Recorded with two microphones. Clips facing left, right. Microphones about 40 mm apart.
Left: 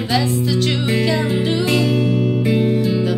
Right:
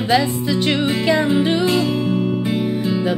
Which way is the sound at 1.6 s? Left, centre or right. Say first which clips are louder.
Left 1 dB; right.